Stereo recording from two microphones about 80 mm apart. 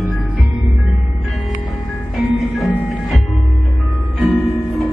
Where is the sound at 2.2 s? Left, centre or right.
Centre.